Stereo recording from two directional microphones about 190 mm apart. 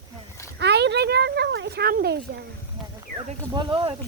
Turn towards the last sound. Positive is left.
turn(degrees=-30)  # may be behind; listen again after turning